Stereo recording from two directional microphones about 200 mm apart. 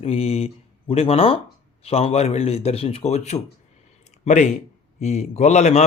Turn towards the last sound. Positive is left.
turn(degrees=35)  # may be behind; listen again after turning